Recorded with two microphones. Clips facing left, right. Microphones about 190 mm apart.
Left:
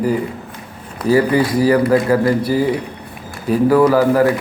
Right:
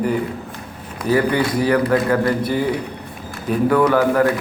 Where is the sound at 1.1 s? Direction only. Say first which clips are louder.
Left 4 dB; 30° left (ahead or behind).